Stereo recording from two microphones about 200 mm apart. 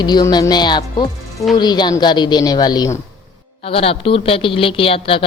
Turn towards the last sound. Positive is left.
turn(degrees=25)  # may be behind; listen again after turning